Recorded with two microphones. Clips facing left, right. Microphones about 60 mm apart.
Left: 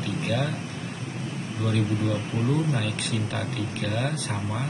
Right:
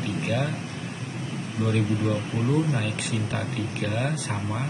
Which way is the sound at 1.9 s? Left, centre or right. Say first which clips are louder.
Right 1 dB; centre.